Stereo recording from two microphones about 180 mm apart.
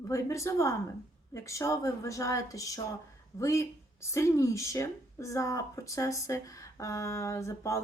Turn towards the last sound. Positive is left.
turn(degrees=15)  # may be behind; listen again after turning